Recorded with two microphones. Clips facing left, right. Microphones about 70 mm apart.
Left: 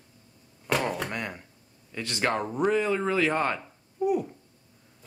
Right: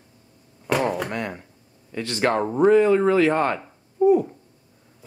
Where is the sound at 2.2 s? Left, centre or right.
Right.